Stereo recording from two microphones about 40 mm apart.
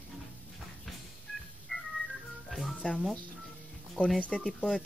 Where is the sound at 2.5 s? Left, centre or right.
Centre.